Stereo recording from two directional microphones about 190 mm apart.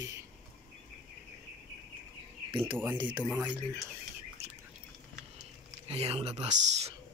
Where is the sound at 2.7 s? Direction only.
10° right (ahead or behind).